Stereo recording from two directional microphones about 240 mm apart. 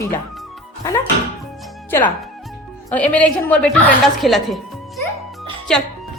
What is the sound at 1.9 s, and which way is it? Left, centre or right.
Speech, centre.